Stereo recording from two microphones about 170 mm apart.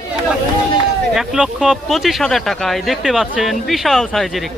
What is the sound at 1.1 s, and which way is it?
Speech, 5° right (ahead or behind).